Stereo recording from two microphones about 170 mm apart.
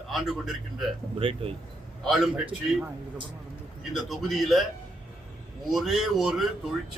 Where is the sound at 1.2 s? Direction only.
35° right (ahead or behind).